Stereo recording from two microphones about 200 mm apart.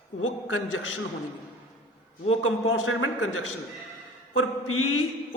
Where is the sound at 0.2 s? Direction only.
85° left.